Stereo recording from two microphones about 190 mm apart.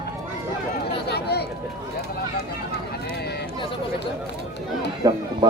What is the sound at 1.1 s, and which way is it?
Speech, 60° left (ahead or behind).